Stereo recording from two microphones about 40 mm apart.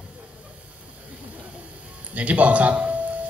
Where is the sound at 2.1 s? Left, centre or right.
Right.